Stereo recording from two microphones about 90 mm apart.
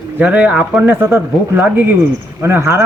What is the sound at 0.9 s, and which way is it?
A man's voice, 25° right (ahead or behind).